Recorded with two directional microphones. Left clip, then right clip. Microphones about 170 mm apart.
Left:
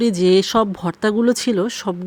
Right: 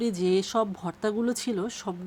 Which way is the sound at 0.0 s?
30° left (ahead or behind).